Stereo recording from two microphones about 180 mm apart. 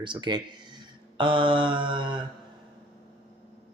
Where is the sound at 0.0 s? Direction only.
25° right (ahead or behind).